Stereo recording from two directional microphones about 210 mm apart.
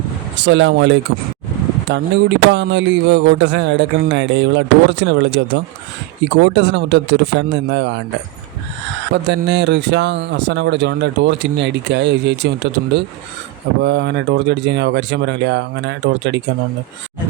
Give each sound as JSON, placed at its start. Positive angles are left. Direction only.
{"t": 0.3, "sound": "speech", "side_deg": -60}
{"t": 9.2, "sound": "speech", "side_deg": -55}